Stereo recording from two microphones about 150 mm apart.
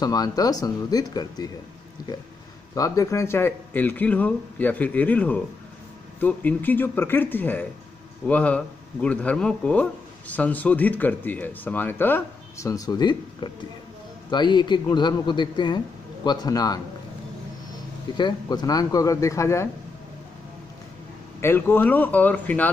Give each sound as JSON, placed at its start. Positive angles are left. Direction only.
{"t": 0.0, "sound": "speech", "side_deg": 25}
{"t": 2.7, "sound": "a man's voice", "side_deg": 25}
{"t": 18.1, "sound": "speech", "side_deg": 30}
{"t": 21.4, "sound": "a man's voice", "side_deg": 15}